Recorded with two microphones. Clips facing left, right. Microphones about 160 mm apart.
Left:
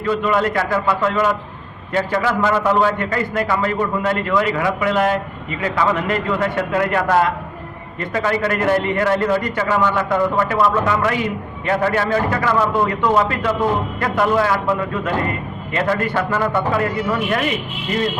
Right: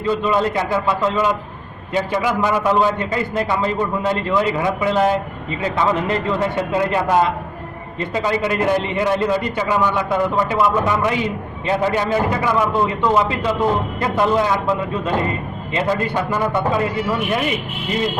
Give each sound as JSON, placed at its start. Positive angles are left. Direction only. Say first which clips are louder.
{"t": 0.2, "sound": "a man's voice", "louder": "even", "side_deg": -20}
{"t": 15.7, "sound": "a man's voice", "louder": "even", "side_deg": -20}